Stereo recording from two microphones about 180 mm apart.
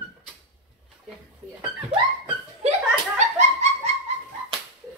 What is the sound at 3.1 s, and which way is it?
Dog, 40° right (ahead or behind).